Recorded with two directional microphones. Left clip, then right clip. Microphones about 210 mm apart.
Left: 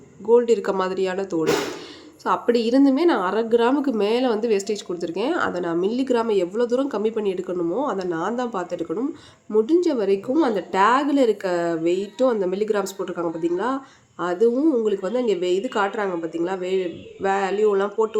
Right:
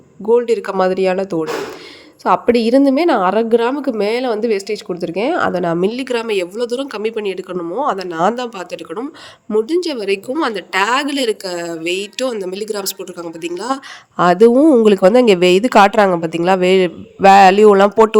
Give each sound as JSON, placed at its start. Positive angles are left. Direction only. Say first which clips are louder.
{"t": 0.3, "sound": "speech", "louder": "right 3 dB", "side_deg": -30}
{"t": 11.4, "sound": "speech", "louder": "even", "side_deg": 0}
{"t": 11.8, "sound": "speech", "louder": "right 1 dB", "side_deg": -50}
{"t": 13.0, "sound": "speech", "louder": "left 1 dB", "side_deg": 0}
{"t": 14.2, "sound": "speech", "louder": "right 10 dB", "side_deg": -45}